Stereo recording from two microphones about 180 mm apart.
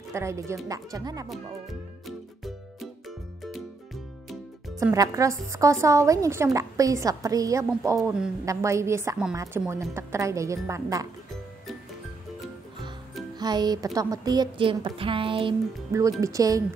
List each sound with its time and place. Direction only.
0.1 s a woman's voice: 15° right (ahead or behind)
1.3 s music: centre (ahead or behind)
3.9 s music: centre (ahead or behind)
4.9 s a woman's voice: 20° right (ahead or behind)
13.4 s a woman's voice: 20° right (ahead or behind)
15.9 s a woman's voice: 15° right (ahead or behind)